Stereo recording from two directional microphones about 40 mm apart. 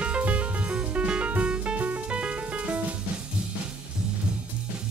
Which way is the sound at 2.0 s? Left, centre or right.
Right.